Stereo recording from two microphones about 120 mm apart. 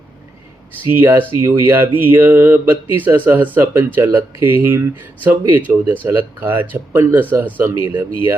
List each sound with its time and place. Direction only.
0.9 s speech: 20° right (ahead or behind)